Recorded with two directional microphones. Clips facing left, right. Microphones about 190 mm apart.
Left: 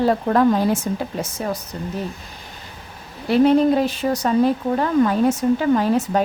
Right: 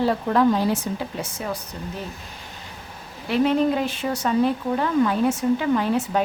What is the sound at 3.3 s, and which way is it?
Speech, 40° left (ahead or behind).